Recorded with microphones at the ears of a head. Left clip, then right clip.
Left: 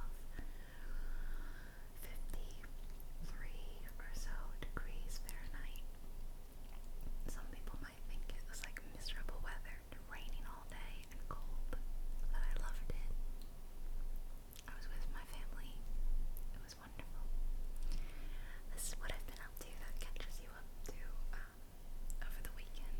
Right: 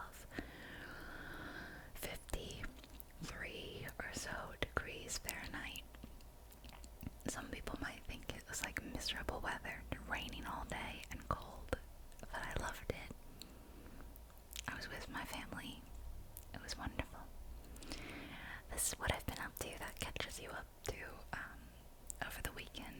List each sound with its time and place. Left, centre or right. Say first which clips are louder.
0.0 s whispering: right 9 dB; right
7.0 s whispering: right 10 dB; right
14.5 s whispering: right 11 dB; right